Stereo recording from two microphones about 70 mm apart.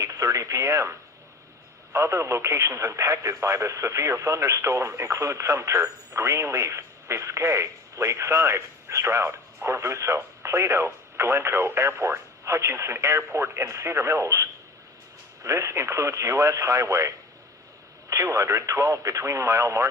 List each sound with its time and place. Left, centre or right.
0.0 s speech: right
15.4 s speech: right